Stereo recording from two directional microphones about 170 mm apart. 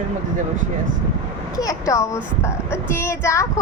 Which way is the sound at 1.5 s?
20° left (ahead or behind).